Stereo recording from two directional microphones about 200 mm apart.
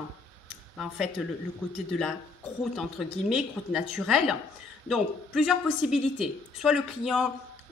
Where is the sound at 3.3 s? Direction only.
5° right (ahead or behind).